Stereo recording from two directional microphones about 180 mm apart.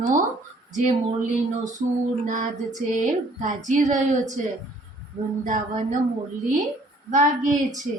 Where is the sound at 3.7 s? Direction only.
45° right (ahead or behind).